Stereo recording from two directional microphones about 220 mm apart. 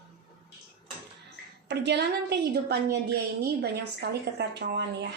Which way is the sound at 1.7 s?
50° right (ahead or behind).